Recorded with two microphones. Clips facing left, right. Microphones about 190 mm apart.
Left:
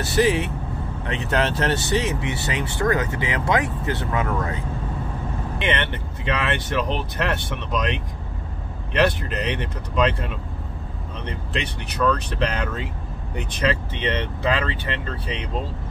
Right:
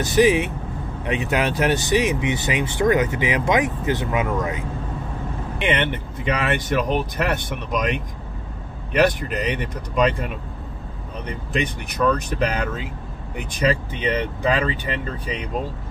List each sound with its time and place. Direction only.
0.0 s speech: 15° right (ahead or behind)
12.0 s speech: 10° right (ahead or behind)